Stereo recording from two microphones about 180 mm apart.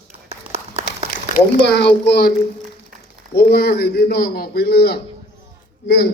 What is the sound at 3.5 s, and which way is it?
Speech, 60° left (ahead or behind).